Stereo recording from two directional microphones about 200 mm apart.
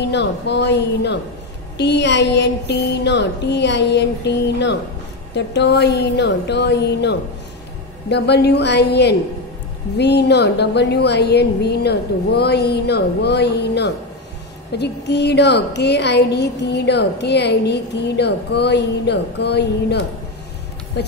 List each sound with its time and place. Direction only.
0.0 s a woman's voice: 60° left (ahead or behind)